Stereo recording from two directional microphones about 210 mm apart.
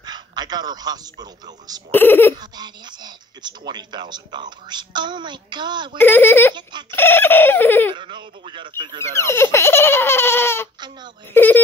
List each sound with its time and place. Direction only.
0.0 s a sound: 20° right (ahead or behind)
1.2 s speech: 20° right (ahead or behind)
1.9 s speech: 10° left (ahead or behind)
2.3 s speech: 20° right (ahead or behind)
5.9 s speech: 10° left (ahead or behind)
6.5 s speech: 20° right (ahead or behind)
6.9 s speech: 10° left (ahead or behind)
7.9 s speech: 20° right (ahead or behind)
9.2 s speech: 10° left (ahead or behind)